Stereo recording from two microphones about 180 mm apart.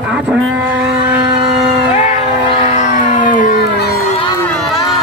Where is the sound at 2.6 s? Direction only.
45° left (ahead or behind).